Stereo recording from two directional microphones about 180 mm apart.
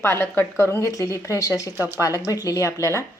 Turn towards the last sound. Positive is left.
turn(degrees=15)  # may be behind; listen again after turning